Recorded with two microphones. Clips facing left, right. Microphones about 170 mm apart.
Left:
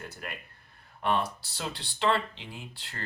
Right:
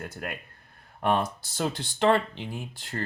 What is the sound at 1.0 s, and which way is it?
Speech, 45° right (ahead or behind).